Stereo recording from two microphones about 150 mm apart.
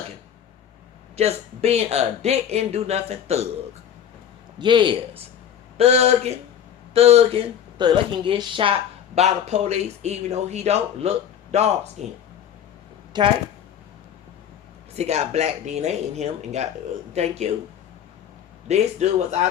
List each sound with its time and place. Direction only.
1.1 s speech: 45° right (ahead or behind)
4.6 s speech: 30° right (ahead or behind)
5.7 s speech: 45° right (ahead or behind)
13.1 s speech: 30° right (ahead or behind)
14.9 s speech: 45° right (ahead or behind)
18.7 s speech: 50° right (ahead or behind)